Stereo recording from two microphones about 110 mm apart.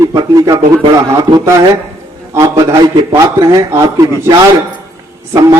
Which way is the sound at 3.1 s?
25° right (ahead or behind).